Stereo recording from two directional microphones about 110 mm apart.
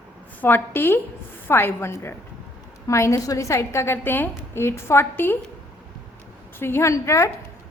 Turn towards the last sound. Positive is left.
turn(degrees=25)  # may be behind; listen again after turning